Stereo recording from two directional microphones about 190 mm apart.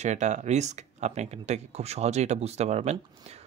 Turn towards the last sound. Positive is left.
turn(degrees=-35)  # may be behind; listen again after turning